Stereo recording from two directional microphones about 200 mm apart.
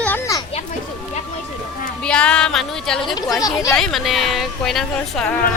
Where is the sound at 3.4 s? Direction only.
15° left (ahead or behind).